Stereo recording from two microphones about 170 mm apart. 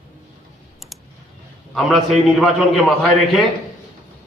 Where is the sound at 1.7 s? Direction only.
Centre (ahead or behind).